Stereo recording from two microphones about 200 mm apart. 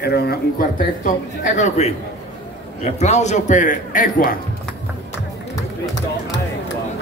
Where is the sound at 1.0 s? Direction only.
40° left (ahead or behind).